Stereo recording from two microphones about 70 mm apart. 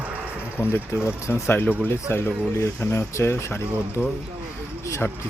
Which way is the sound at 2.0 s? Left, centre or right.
Left.